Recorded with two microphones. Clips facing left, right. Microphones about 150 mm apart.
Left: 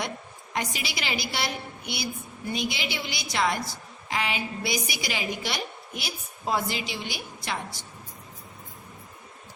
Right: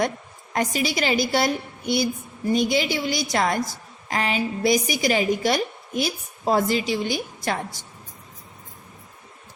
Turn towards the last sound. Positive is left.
turn(degrees=-45)  # may be behind; listen again after turning